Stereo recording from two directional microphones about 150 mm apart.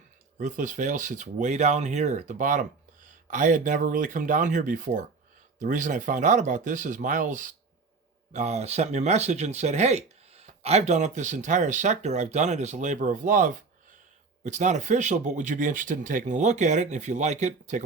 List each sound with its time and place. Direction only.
0.3 s speech: 60° right (ahead or behind)